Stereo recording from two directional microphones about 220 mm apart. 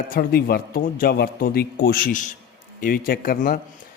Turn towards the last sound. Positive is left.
turn(degrees=40)  # may be behind; listen again after turning